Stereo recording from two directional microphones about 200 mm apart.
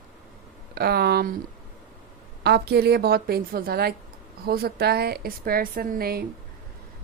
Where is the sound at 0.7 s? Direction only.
50° right (ahead or behind).